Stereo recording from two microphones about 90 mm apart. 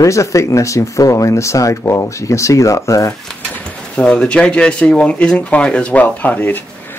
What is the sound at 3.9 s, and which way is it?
Speech, 15° left (ahead or behind).